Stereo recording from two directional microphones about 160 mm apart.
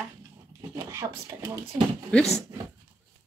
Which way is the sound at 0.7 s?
20° right (ahead or behind).